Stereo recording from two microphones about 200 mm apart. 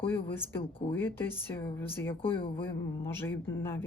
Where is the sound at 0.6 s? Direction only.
25° left (ahead or behind).